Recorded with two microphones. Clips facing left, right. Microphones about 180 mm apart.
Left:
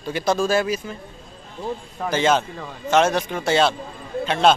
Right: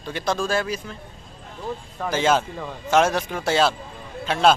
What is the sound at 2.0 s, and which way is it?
Speech, 5° right (ahead or behind).